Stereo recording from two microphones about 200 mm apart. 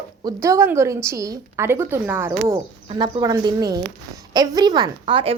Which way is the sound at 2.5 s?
20° right (ahead or behind).